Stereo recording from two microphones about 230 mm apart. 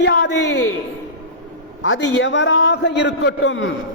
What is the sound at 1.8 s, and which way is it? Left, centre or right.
A man's voice, left.